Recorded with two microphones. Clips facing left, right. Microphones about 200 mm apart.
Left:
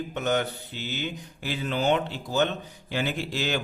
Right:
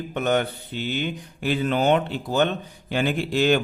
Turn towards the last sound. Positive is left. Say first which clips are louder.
# right 8 dB
turn(degrees=-55)  # may be behind; listen again after turning